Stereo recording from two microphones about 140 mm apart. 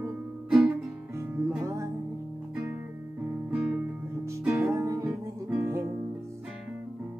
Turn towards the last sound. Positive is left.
turn(degrees=-15)  # may be behind; listen again after turning